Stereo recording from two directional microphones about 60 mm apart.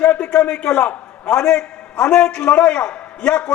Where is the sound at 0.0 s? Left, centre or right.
Left.